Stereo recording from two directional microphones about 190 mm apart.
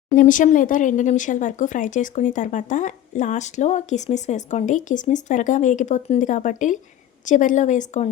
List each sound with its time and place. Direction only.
0.2 s speech: 45° left (ahead or behind)